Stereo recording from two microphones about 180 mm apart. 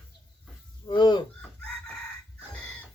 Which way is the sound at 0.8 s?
25° left (ahead or behind).